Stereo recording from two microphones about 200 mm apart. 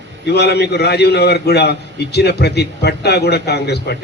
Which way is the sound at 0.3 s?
55° left (ahead or behind).